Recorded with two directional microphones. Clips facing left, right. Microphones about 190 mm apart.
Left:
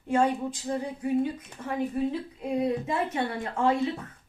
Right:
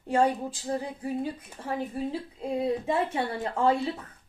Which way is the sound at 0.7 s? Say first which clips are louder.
Left 3 dB; 35° right (ahead or behind).